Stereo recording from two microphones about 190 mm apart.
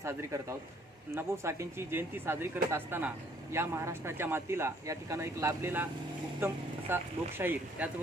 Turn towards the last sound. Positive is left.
turn(degrees=-10)  # may be behind; listen again after turning